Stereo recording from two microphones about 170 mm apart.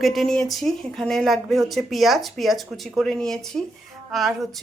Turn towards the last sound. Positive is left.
turn(degrees=0)  # may be behind; listen again after turning